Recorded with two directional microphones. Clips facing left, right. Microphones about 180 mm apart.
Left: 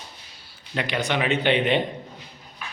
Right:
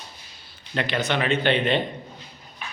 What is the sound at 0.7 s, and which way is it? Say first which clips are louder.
Speech: even; 15° left (ahead or behind).